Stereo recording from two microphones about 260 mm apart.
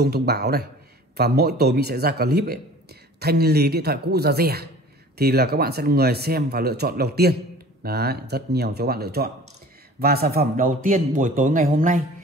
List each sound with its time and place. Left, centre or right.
0.0 s speech: right